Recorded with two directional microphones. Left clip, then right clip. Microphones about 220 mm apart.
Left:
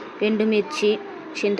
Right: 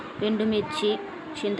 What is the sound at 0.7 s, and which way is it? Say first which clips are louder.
Speech: left 4 dB; 40° left (ahead or behind).